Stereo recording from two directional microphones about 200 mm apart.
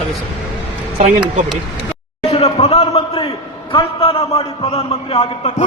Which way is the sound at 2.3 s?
30° left (ahead or behind).